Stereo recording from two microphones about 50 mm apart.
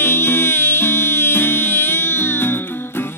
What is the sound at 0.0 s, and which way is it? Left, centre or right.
Music, left.